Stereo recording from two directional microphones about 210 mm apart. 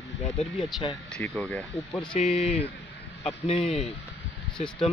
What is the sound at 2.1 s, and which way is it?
Speech, 30° left (ahead or behind).